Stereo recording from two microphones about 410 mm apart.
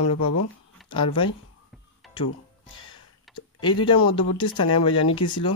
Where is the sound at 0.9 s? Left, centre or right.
Centre.